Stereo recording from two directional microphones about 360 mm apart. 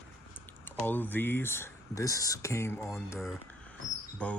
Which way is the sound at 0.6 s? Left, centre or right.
Centre.